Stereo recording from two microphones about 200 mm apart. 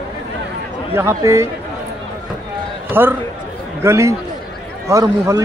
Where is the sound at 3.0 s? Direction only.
10° right (ahead or behind).